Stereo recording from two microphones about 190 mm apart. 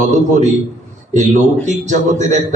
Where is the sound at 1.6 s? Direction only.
40° right (ahead or behind).